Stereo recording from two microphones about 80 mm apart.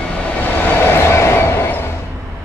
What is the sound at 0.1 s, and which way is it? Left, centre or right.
Train, centre.